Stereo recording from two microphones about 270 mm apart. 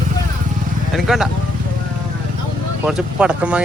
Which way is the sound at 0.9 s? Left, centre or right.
Centre.